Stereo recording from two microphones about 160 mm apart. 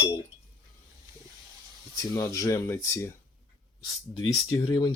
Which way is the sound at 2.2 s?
20° left (ahead or behind).